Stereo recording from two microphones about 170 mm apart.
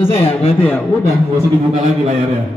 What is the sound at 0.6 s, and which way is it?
Speech, 10° left (ahead or behind).